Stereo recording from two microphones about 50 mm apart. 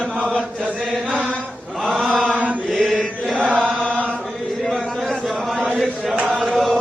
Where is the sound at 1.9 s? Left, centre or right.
Centre.